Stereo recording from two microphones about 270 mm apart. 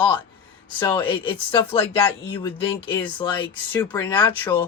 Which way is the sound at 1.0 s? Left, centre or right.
Centre.